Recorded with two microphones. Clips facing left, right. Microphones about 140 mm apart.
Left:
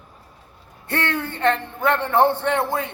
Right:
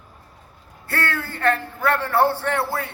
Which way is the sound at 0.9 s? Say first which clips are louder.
Left 2 dB; 20° left (ahead or behind).